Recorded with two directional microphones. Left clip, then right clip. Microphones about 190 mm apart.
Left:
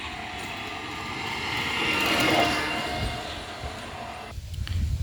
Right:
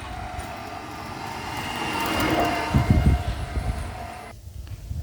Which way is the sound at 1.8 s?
15° right (ahead or behind).